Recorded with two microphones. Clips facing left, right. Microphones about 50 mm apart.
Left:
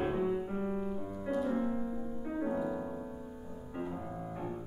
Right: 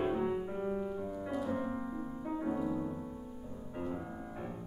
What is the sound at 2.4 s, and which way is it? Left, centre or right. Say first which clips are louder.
Music: left 2 dB; centre.